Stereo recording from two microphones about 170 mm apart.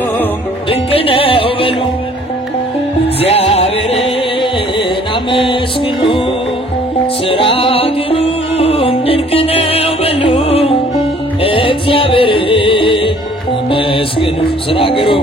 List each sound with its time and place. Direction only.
0.7 s music: 30° left (ahead or behind)
3.2 s music: 35° left (ahead or behind)
7.2 s music: 35° left (ahead or behind)